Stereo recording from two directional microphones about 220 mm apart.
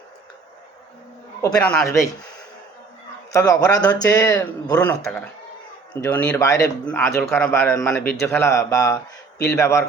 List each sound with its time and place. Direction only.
1.6 s a man's voice: 10° left (ahead or behind)
3.3 s a man's voice: 15° left (ahead or behind)